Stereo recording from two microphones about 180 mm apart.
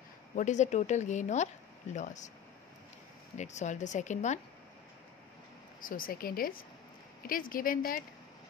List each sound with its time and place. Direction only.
0.4 s a woman's voice: 40° left (ahead or behind)
3.3 s a woman's voice: 40° left (ahead or behind)
5.8 s speech: 50° left (ahead or behind)